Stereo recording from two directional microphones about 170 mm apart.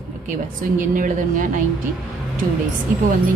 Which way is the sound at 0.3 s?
50° right (ahead or behind).